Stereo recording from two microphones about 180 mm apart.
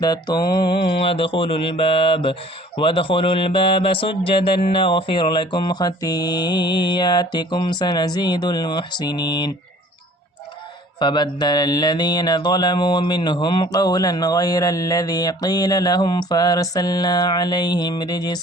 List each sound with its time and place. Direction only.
0.0 s mantra: 25° left (ahead or behind)
11.0 s mantra: 25° left (ahead or behind)